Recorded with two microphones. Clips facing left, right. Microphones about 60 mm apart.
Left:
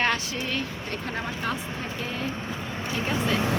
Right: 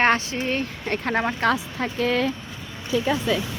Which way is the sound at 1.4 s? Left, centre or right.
Right.